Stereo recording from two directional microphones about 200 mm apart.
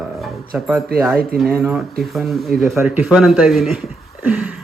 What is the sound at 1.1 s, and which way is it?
Speech, 50° right (ahead or behind).